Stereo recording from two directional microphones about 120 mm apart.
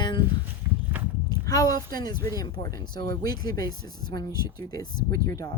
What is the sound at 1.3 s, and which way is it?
Speech, 30° left (ahead or behind).